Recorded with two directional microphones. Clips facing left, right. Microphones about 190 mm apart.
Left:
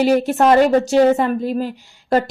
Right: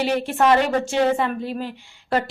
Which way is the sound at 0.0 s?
40° left (ahead or behind).